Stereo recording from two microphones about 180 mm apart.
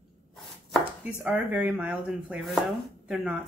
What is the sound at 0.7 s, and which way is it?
Speech, 5° right (ahead or behind).